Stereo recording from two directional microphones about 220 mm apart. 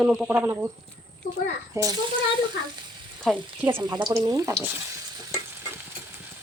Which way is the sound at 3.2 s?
10° right (ahead or behind).